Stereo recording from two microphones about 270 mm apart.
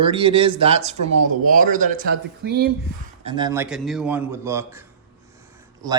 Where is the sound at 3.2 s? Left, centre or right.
Centre.